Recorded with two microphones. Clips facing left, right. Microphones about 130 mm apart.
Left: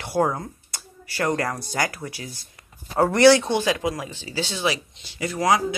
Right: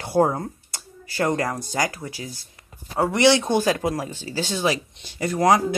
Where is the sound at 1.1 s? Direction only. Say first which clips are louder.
Right 1 dB; 20° right (ahead or behind).